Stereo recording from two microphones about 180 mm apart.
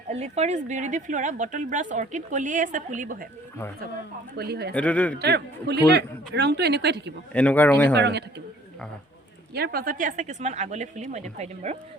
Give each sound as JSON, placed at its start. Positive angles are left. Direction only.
{"t": 0.1, "sound": "speech", "side_deg": -35}
{"t": 4.4, "sound": "speech", "side_deg": -65}
{"t": 4.7, "sound": "a man's voice", "side_deg": 10}
{"t": 5.2, "sound": "speech", "side_deg": -65}
{"t": 7.3, "sound": "a man's voice", "side_deg": 10}
{"t": 7.9, "sound": "speech", "side_deg": -70}
{"t": 9.6, "sound": "speech", "side_deg": -60}